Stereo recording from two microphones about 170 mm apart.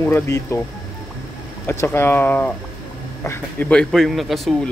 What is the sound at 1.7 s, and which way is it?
A man's voice, 15° left (ahead or behind).